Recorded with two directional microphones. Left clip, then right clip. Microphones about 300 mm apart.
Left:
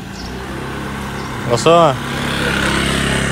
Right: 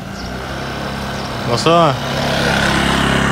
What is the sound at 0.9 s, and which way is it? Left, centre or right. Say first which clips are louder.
Vehicle: right 2 dB; centre.